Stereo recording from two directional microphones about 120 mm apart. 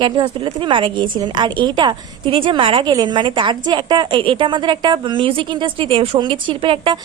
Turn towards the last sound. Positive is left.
turn(degrees=-45)  # may be behind; listen again after turning